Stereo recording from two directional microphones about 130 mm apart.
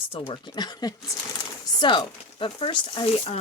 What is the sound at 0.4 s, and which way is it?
Speech, 35° left (ahead or behind).